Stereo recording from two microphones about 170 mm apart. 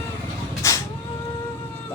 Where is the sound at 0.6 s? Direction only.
20° left (ahead or behind).